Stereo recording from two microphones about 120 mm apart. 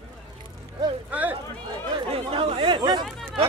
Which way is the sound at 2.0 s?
50° right (ahead or behind).